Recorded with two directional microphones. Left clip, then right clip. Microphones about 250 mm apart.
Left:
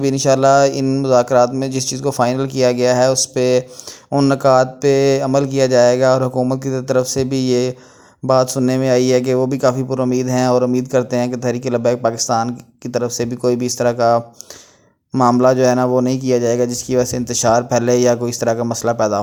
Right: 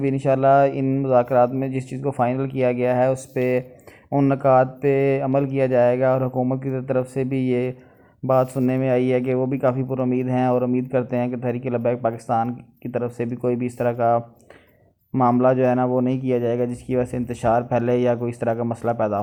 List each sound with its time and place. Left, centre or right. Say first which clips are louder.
0.0 s speech: left 5 dB; left